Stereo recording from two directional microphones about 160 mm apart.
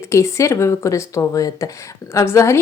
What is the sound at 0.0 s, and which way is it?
A woman's voice, 15° left (ahead or behind).